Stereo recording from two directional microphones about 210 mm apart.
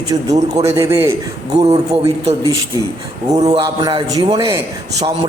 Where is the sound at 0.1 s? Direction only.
20° right (ahead or behind).